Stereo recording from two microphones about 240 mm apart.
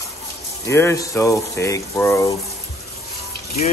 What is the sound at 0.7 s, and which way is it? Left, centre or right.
Speech, centre.